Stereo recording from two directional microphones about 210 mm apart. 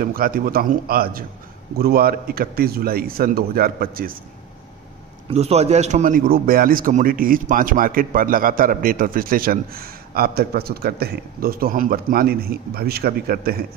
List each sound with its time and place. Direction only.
0.0 s a man's voice: 45° right (ahead or behind)
5.3 s a man's voice: 30° right (ahead or behind); by 13.7 s 45° right (ahead or behind)